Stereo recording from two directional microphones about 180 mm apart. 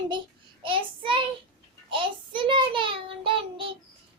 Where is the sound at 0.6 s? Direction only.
30° right (ahead or behind).